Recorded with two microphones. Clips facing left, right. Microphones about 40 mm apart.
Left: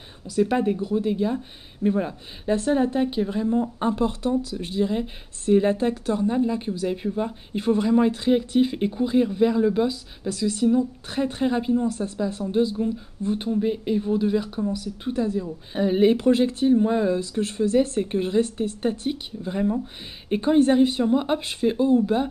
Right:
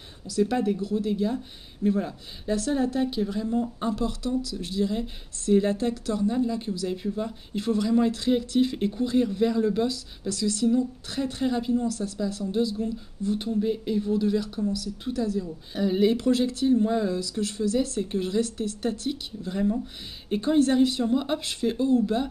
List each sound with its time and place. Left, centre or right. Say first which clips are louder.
0.3 s speech: left 3 dB; left